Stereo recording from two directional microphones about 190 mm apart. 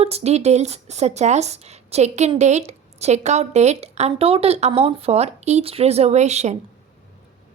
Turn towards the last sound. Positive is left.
turn(degrees=-35)  # may be behind; listen again after turning